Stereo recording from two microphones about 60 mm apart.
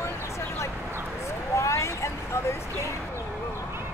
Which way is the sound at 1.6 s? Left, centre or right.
Left.